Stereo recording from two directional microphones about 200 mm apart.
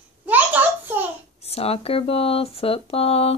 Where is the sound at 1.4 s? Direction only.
30° left (ahead or behind).